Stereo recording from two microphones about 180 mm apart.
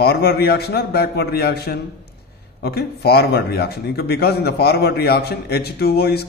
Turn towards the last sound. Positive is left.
turn(degrees=65)  # may be behind; listen again after turning